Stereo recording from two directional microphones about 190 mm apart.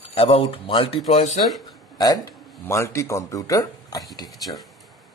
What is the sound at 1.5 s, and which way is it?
Speech, centre (ahead or behind).